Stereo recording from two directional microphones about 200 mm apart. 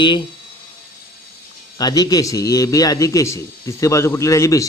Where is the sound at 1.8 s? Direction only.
20° left (ahead or behind).